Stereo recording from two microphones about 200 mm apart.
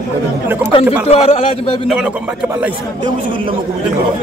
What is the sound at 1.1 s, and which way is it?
Speech, 30° left (ahead or behind).